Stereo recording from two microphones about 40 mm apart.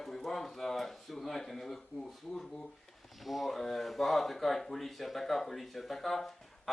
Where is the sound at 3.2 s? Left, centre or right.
Centre.